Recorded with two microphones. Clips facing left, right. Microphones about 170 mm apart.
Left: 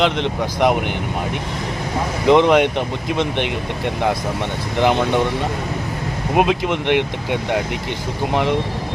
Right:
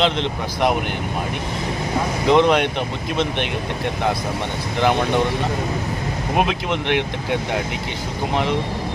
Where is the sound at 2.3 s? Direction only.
15° left (ahead or behind).